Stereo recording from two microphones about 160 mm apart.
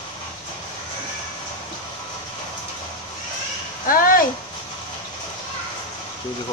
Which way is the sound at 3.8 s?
60° left (ahead or behind).